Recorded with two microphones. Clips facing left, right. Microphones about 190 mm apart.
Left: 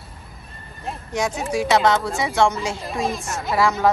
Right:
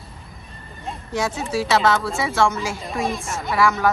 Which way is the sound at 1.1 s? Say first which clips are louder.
Even; 15° left (ahead or behind).